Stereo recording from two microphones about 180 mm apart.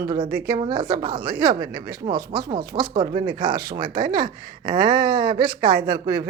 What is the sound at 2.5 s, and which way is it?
Speech, 25° right (ahead or behind).